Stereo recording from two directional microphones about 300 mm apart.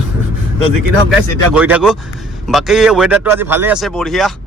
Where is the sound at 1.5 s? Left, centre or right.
Centre.